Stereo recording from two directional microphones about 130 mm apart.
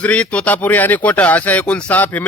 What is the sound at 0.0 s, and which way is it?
Speech, 10° left (ahead or behind).